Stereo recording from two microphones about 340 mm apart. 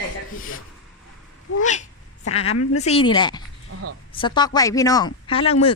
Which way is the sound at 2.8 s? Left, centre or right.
Centre.